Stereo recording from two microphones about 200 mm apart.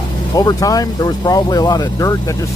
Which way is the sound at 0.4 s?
20° left (ahead or behind).